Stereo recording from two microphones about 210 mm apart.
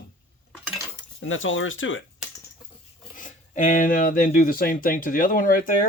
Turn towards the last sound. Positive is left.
turn(degrees=40)  # may be behind; listen again after turning